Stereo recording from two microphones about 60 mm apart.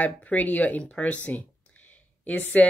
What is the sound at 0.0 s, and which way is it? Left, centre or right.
Speech, left.